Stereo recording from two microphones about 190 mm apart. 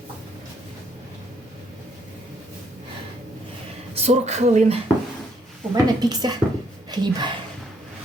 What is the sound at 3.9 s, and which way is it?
Speech, 35° right (ahead or behind).